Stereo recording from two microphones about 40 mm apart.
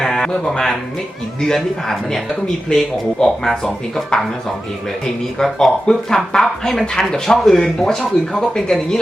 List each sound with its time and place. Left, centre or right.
0.0 s music: centre
0.3 s speech: centre